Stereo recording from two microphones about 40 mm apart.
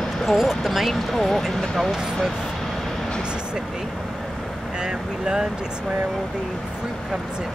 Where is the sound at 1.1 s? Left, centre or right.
Centre.